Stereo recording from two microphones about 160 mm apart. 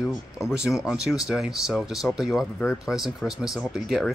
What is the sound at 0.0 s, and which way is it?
Speech, centre (ahead or behind).